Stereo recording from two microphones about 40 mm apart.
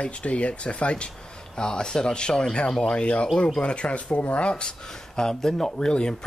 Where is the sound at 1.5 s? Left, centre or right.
Centre.